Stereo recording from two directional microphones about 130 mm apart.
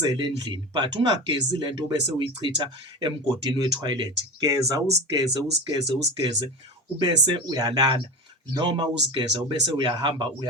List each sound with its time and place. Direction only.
0.2 s speech: 35° right (ahead or behind)